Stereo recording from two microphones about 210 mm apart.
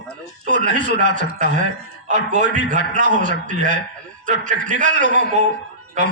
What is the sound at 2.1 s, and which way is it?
A man's voice, 40° right (ahead or behind).